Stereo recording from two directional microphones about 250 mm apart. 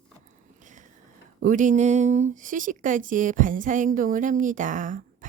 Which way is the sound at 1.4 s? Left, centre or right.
Right.